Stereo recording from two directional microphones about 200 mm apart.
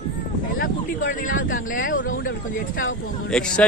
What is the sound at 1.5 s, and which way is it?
Speech, 40° left (ahead or behind).